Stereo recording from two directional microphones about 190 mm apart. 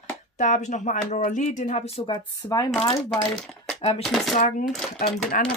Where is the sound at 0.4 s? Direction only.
40° left (ahead or behind).